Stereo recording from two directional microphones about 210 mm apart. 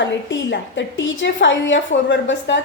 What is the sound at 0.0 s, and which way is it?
A woman's voice, 60° left (ahead or behind).